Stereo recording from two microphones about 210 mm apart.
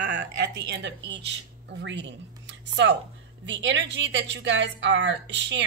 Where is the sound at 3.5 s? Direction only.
60° right (ahead or behind).